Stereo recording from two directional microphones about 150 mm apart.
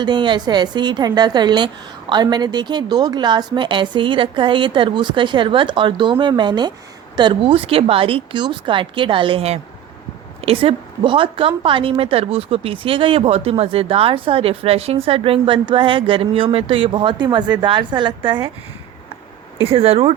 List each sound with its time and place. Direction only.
0.0 s a woman's voice: 30° right (ahead or behind)
19.6 s a woman's voice: 40° right (ahead or behind)